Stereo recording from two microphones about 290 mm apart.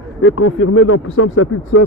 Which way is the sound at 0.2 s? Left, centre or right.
Left.